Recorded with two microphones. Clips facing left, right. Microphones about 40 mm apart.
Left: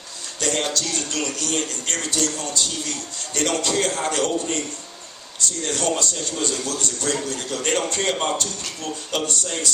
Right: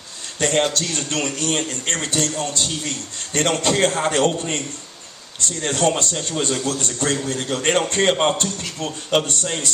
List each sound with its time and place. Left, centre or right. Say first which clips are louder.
0.3 s a man's voice: right 5 dB; right